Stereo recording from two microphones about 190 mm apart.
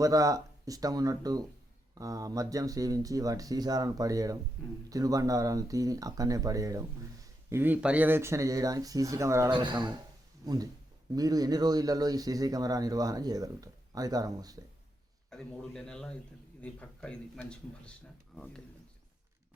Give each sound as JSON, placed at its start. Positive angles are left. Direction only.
{"t": 0.0, "sound": "speech", "side_deg": -20}
{"t": 15.3, "sound": "speech", "side_deg": 5}